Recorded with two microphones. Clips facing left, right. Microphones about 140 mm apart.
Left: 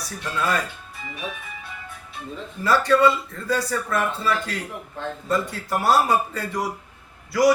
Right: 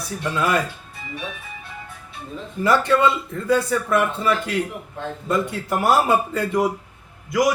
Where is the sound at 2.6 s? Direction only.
20° right (ahead or behind).